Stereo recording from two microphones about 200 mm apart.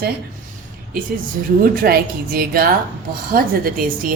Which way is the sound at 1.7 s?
50° right (ahead or behind).